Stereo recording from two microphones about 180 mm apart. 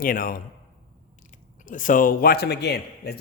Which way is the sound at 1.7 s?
45° left (ahead or behind).